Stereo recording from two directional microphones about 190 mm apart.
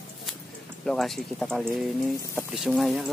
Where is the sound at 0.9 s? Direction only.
Centre (ahead or behind).